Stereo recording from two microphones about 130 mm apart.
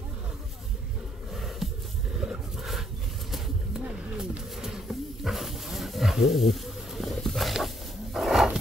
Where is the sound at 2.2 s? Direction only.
Centre (ahead or behind).